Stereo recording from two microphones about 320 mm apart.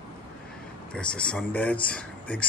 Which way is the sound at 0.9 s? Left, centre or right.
Centre.